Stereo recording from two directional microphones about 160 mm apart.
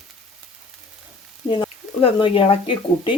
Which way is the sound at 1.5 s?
30° left (ahead or behind).